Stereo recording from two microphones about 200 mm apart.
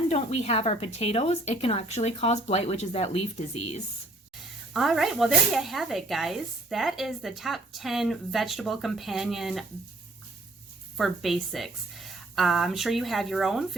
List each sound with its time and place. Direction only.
0.1 s speech: 30° left (ahead or behind)
4.7 s speech: centre (ahead or behind)
10.9 s speech: centre (ahead or behind)